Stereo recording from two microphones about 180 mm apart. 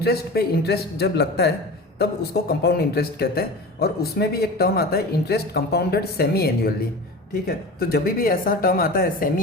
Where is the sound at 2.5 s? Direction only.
65° left (ahead or behind).